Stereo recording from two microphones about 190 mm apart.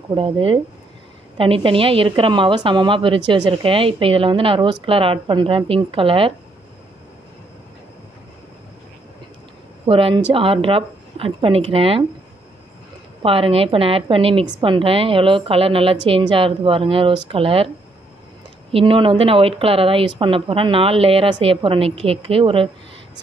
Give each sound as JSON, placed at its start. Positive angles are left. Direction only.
{"t": 0.1, "sound": "a woman's voice", "side_deg": -30}
{"t": 9.8, "sound": "a woman's voice", "side_deg": -30}
{"t": 13.2, "sound": "a woman's voice", "side_deg": -30}
{"t": 18.7, "sound": "a woman's voice", "side_deg": -30}